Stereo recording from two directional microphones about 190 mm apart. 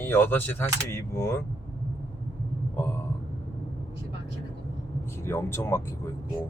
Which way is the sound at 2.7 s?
10° left (ahead or behind).